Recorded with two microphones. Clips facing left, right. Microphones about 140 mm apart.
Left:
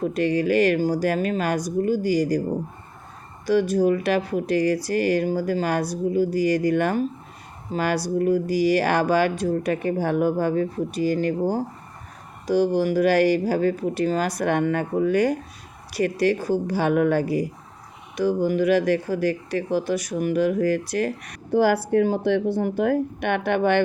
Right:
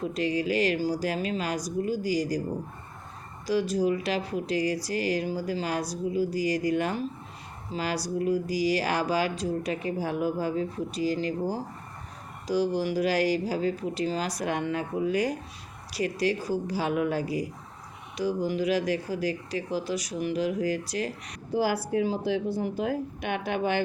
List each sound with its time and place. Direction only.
0.0 s speech: 60° left (ahead or behind)
3.4 s speech: 55° left (ahead or behind)
12.5 s speech: 60° left (ahead or behind)